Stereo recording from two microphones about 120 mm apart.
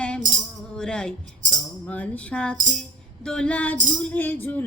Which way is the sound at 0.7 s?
5° left (ahead or behind).